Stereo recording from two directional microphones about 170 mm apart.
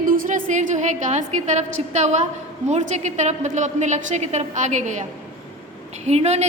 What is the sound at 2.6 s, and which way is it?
A woman's voice, 40° right (ahead or behind).